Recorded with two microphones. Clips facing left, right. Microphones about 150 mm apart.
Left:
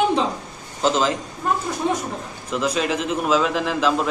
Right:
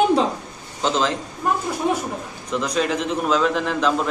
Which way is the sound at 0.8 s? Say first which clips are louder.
Left 2 dB; 5° left (ahead or behind).